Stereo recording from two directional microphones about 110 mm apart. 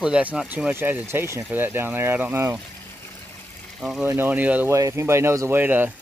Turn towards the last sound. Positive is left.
turn(degrees=-15)  # may be behind; listen again after turning